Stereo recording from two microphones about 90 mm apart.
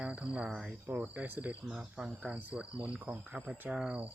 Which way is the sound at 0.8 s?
25° right (ahead or behind).